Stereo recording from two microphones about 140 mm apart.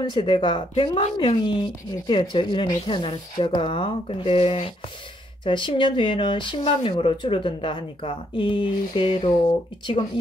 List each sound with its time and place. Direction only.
0.1 s speech: 35° left (ahead or behind)